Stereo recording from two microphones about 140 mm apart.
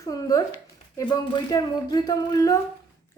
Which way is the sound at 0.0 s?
25° left (ahead or behind).